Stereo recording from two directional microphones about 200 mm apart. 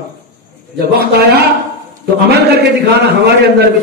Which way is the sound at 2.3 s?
55° right (ahead or behind).